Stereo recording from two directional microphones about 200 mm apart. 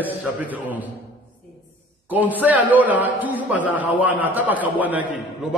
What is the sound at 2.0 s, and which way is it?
A man's voice, 10° right (ahead or behind).